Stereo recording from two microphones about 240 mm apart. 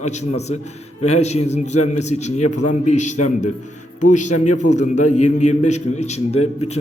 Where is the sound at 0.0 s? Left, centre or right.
Left.